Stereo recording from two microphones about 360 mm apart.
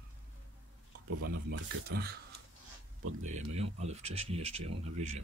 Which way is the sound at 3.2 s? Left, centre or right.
Centre.